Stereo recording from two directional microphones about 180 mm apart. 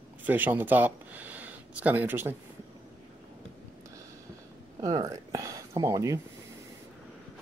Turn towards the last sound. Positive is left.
turn(degrees=-15)  # may be behind; listen again after turning